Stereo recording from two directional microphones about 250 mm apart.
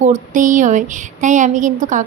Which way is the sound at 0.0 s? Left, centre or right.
Right.